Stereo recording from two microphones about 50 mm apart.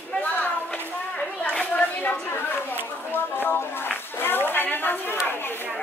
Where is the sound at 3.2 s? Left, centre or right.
Left.